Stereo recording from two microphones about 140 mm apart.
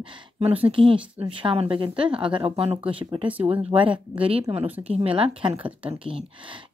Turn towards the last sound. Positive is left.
turn(degrees=-40)  # may be behind; listen again after turning